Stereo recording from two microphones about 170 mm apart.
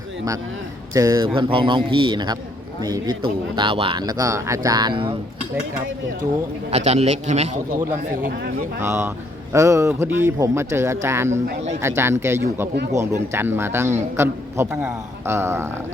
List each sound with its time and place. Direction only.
0.9 s speech: 20° right (ahead or behind)
6.7 s a man's voice: 40° right (ahead or behind)
8.8 s a man's voice: 15° right (ahead or behind)